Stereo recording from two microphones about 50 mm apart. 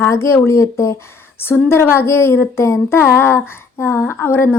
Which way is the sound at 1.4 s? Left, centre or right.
Left.